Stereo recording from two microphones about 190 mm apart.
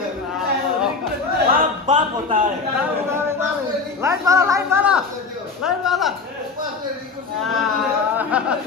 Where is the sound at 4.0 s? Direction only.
15° right (ahead or behind).